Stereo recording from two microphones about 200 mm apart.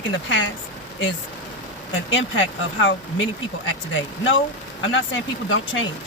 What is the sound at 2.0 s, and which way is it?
Speech, 70° left (ahead or behind).